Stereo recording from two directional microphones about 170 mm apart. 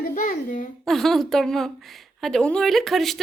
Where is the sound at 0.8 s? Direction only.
Centre (ahead or behind).